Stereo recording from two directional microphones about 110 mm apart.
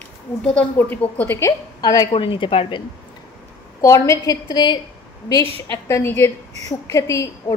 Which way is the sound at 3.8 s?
30° left (ahead or behind).